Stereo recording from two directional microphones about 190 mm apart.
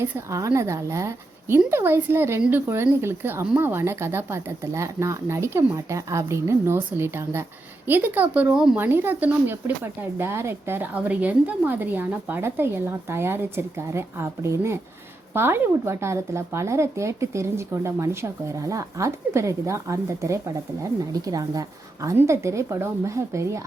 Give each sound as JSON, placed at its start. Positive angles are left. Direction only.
{"t": 0.0, "sound": "a woman's voice", "side_deg": -15}